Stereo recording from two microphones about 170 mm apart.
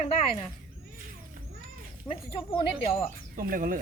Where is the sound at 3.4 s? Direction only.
55° right (ahead or behind).